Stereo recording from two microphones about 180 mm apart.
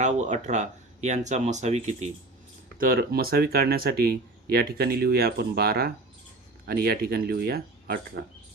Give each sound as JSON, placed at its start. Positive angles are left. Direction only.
{"t": 0.0, "sound": "speech", "side_deg": -40}
{"t": 2.7, "sound": "speech", "side_deg": -55}